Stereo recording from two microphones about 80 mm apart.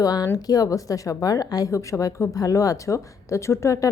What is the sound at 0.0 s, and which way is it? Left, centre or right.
A woman's voice, left.